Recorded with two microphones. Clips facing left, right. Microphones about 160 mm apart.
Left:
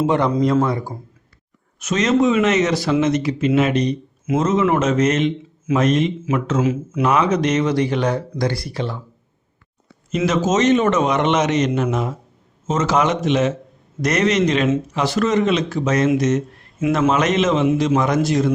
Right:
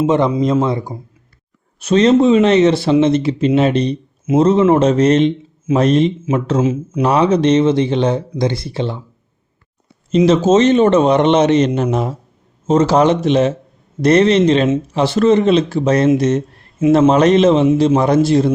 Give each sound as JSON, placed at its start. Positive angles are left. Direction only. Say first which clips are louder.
{"t": 0.0, "sound": "speech", "louder": "right 3 dB", "side_deg": -20}
{"t": 10.2, "sound": "speech", "louder": "right 5 dB", "side_deg": -30}